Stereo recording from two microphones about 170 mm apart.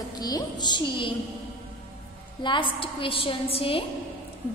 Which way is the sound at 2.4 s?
30° left (ahead or behind).